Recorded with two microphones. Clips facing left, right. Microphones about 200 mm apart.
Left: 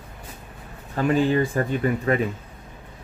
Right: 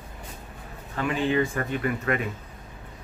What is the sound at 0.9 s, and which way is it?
Speech, 35° left (ahead or behind).